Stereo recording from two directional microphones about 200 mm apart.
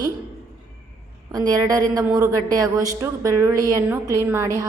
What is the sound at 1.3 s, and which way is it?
A woman's voice, 20° right (ahead or behind).